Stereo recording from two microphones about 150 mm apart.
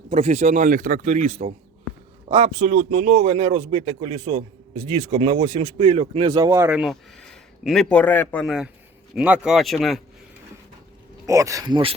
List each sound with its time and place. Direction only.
0.1 s speech: 50° right (ahead or behind)
2.3 s speech: 35° right (ahead or behind)
2.9 s speech: 60° right (ahead or behind); by 6.2 s 40° right (ahead or behind)
6.2 s a man's voice: 25° right (ahead or behind)
6.8 s speech: centre (ahead or behind)
8.4 s speech: 5° right (ahead or behind)
11.3 s a man's voice: 20° right (ahead or behind)